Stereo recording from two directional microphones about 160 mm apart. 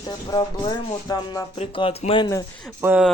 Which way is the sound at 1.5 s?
35° left (ahead or behind).